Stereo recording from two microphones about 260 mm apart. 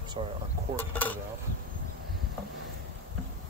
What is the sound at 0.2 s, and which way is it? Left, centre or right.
Speech, right.